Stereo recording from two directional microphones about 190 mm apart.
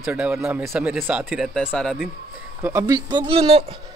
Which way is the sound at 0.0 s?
10° right (ahead or behind).